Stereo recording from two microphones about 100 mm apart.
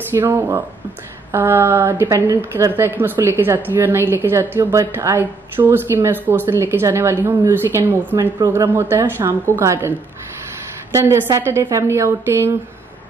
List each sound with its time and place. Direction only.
0.1 s a woman's voice: 25° right (ahead or behind)
11.3 s a woman's voice: 30° right (ahead or behind)